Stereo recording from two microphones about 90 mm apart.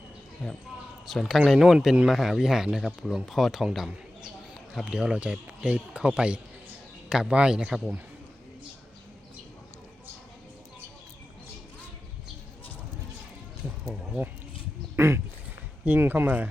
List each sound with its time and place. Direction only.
0.4 s speech: 10° left (ahead or behind)
1.0 s a man's voice: centre (ahead or behind)
14.9 s quack: 30° right (ahead or behind)
15.8 s speech: 20° right (ahead or behind)